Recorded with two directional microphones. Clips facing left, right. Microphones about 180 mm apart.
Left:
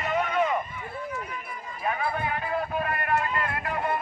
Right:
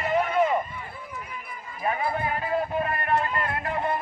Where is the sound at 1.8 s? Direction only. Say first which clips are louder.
Right 2 dB; 25° right (ahead or behind).